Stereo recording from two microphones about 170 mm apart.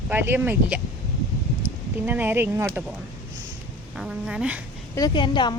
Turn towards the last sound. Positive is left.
turn(degrees=25)  # may be behind; listen again after turning